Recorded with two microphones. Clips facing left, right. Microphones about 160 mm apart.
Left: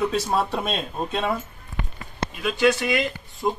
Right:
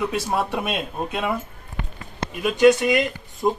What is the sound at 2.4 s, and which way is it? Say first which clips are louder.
Speech: right 5 dB; 45° right (ahead or behind).